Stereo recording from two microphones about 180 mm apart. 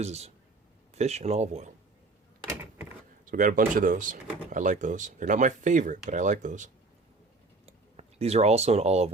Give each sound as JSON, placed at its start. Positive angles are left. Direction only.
{"t": 0.0, "sound": "speech", "side_deg": -35}
{"t": 2.5, "sound": "a sound", "side_deg": -15}
{"t": 3.2, "sound": "speech", "side_deg": -50}
{"t": 7.9, "sound": "speech", "side_deg": -35}